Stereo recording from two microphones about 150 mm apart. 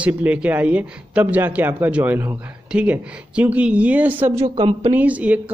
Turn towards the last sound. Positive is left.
turn(degrees=-10)  # may be behind; listen again after turning